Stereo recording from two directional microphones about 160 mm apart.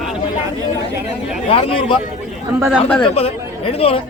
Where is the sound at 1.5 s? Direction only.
35° left (ahead or behind).